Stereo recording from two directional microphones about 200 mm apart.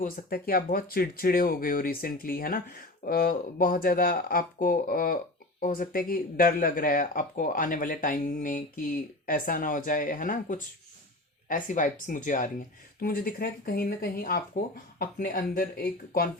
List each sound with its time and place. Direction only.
0.0 s speech: 45° left (ahead or behind)